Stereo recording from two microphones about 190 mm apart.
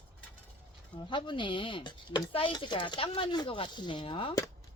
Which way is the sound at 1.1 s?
25° left (ahead or behind).